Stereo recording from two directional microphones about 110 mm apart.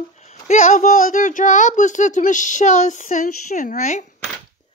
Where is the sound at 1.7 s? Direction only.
90° left.